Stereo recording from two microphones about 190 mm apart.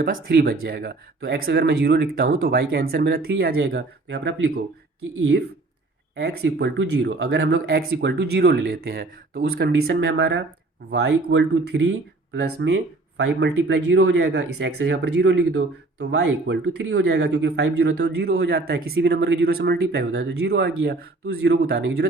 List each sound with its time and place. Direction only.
0.0 s speech: 50° right (ahead or behind)
6.1 s speech: 60° right (ahead or behind)